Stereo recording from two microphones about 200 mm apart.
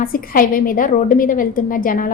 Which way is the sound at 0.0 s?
45° left (ahead or behind).